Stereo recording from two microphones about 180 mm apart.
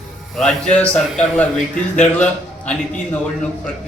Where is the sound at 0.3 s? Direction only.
5° left (ahead or behind).